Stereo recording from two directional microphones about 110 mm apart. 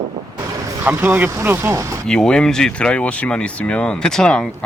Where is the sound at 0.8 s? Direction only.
20° right (ahead or behind).